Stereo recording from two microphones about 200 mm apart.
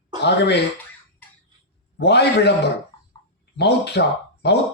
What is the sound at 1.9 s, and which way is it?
Speech, 55° left (ahead or behind).